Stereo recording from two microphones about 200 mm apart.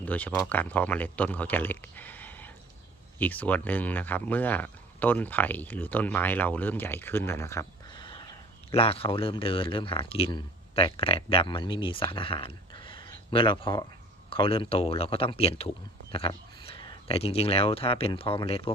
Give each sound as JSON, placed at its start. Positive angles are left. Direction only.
{"t": 0.0, "sound": "speech", "side_deg": 5}